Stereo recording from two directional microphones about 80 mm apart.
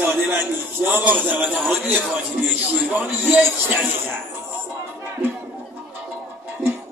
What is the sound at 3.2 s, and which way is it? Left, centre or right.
Speech, right.